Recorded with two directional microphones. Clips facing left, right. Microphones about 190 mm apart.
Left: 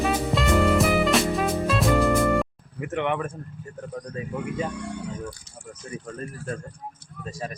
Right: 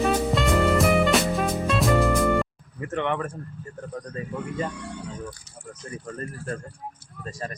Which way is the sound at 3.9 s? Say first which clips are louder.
Left 1 dB; centre (ahead or behind).